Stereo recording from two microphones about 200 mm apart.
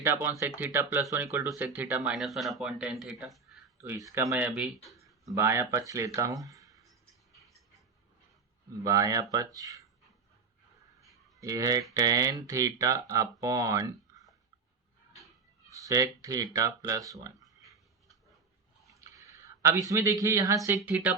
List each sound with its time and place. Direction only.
0.0 s speech: 10° right (ahead or behind)
3.8 s speech: 15° right (ahead or behind)
5.2 s speech: 15° right (ahead or behind)
8.8 s speech: 20° right (ahead or behind)
11.3 s speech: 15° right (ahead or behind)
15.7 s speech: 15° right (ahead or behind)
18.9 s a sound: 15° right (ahead or behind)
19.9 s speech: 15° right (ahead or behind)